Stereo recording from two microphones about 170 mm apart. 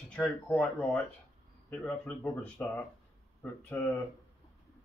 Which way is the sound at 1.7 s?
15° left (ahead or behind).